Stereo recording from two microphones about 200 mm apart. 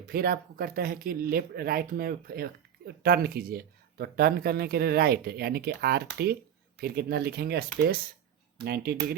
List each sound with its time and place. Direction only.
0.0 s speech: 50° right (ahead or behind)